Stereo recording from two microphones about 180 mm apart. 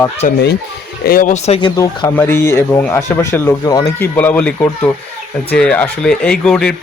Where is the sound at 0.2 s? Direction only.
45° left (ahead or behind).